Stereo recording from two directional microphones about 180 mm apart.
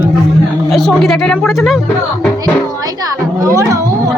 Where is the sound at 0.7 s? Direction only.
Centre (ahead or behind).